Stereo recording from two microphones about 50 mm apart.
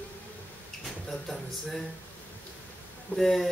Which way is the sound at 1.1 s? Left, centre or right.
Centre.